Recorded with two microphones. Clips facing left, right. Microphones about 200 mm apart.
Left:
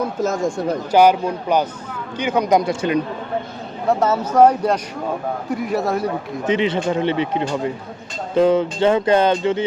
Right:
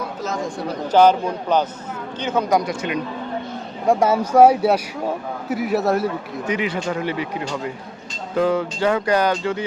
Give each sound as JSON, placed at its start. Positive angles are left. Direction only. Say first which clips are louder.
{"t": 0.2, "sound": "speech", "louder": "left 4 dB", "side_deg": 45}
{"t": 0.9, "sound": "speech", "louder": "even", "side_deg": 10}
{"t": 3.8, "sound": "a man's voice", "louder": "right 1 dB", "side_deg": -10}
{"t": 6.4, "sound": "speech", "louder": "left 5 dB", "side_deg": 25}